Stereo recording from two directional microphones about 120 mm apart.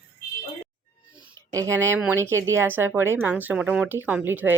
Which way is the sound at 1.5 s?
25° right (ahead or behind).